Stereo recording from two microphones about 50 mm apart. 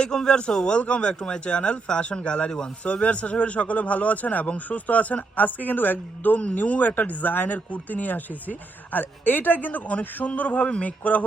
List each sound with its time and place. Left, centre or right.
0.0 s speech: centre
2.8 s speech: left